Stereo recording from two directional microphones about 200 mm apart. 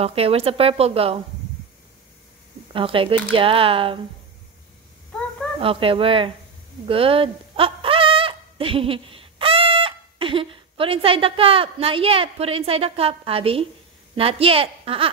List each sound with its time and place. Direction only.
0.0 s speech: 30° right (ahead or behind)
2.7 s speech: 25° right (ahead or behind)
5.6 s speech: 25° right (ahead or behind)